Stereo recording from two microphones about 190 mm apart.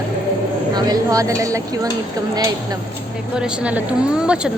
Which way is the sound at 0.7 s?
20° right (ahead or behind).